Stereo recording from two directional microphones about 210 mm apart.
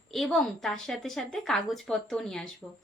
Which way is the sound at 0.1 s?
Centre (ahead or behind).